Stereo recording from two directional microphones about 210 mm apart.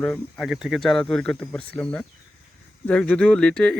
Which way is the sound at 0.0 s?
Centre (ahead or behind).